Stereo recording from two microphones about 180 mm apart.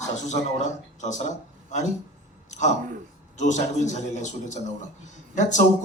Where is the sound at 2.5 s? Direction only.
40° left (ahead or behind).